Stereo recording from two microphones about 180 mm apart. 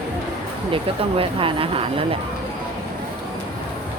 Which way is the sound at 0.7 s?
30° right (ahead or behind).